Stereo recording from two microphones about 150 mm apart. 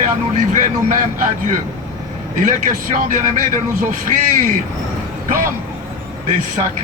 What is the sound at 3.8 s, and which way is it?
Speech, 60° right (ahead or behind).